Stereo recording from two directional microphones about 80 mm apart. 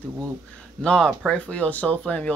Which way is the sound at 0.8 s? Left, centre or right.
Centre.